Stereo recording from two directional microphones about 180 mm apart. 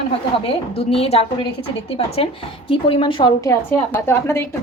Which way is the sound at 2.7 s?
30° left (ahead or behind).